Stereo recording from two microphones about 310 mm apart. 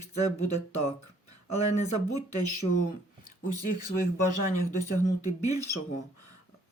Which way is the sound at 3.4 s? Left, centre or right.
Left.